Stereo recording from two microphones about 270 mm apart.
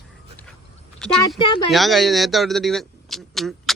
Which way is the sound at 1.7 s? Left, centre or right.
Centre.